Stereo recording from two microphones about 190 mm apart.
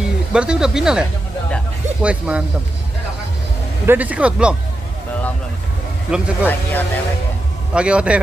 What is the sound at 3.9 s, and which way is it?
Speech, 10° right (ahead or behind).